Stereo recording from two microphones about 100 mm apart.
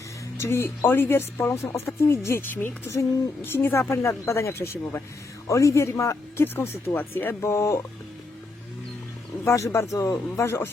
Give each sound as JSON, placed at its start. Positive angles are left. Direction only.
{"t": 0.3, "sound": "a woman's voice", "side_deg": 25}
{"t": 9.4, "sound": "a woman's voice", "side_deg": 25}